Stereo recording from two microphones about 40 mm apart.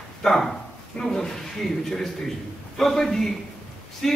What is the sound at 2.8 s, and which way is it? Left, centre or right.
A man's voice, centre.